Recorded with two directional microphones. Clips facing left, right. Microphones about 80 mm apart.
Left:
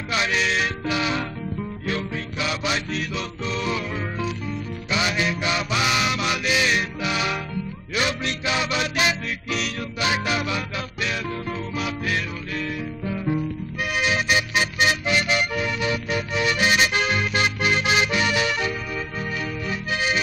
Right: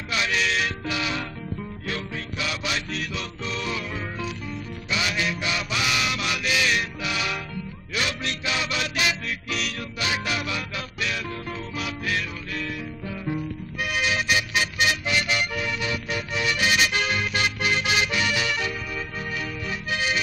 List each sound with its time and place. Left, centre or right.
0.1 s music: left